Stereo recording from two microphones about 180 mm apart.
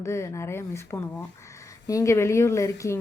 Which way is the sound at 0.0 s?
15° left (ahead or behind).